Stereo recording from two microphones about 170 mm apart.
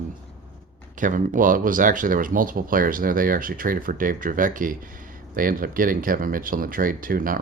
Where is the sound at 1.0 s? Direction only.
50° right (ahead or behind).